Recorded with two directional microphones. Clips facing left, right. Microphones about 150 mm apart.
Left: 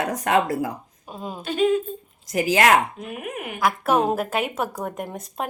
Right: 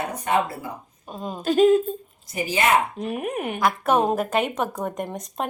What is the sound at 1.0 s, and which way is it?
Speech, 5° left (ahead or behind).